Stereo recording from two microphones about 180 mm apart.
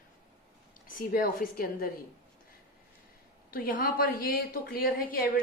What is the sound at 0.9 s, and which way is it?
Speech, 50° left (ahead or behind).